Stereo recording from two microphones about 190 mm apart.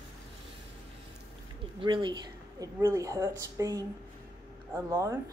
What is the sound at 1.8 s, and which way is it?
A woman's voice, 25° right (ahead or behind).